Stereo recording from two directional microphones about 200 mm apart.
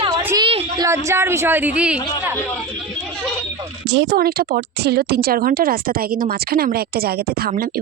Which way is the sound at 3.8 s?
60° right (ahead or behind).